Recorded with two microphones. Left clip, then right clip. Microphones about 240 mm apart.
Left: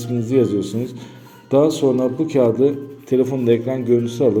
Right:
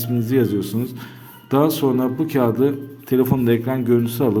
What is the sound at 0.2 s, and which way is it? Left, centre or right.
A man's voice, right.